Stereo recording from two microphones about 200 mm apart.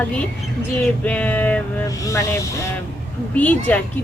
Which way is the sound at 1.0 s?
5° left (ahead or behind).